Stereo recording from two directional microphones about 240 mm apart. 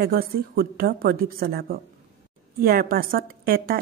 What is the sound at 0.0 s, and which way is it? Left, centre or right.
A woman's voice, right.